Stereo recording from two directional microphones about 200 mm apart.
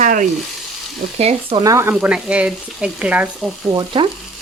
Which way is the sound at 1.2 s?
30° right (ahead or behind).